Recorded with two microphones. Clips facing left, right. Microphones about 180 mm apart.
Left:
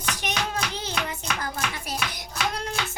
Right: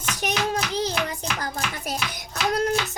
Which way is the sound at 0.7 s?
35° right (ahead or behind).